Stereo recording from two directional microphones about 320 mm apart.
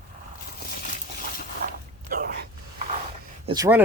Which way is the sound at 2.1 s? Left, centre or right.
Right.